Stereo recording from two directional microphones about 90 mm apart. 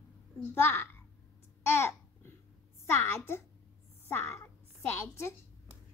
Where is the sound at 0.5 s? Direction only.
25° left (ahead or behind).